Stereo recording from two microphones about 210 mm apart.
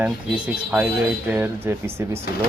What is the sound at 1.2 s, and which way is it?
Speech, 10° right (ahead or behind).